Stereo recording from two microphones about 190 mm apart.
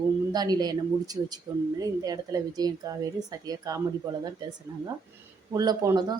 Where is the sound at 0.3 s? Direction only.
20° right (ahead or behind).